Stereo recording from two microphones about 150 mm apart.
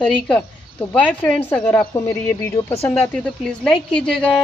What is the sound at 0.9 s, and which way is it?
Speech, 10° left (ahead or behind).